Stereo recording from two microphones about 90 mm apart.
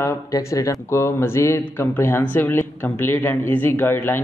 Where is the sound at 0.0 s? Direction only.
35° left (ahead or behind).